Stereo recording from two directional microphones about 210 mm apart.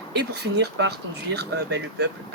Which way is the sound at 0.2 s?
50° right (ahead or behind).